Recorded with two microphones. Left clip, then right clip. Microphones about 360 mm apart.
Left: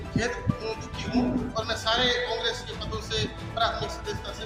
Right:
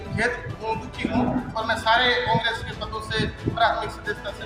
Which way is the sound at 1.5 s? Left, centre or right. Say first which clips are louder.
Right 6 dB; left.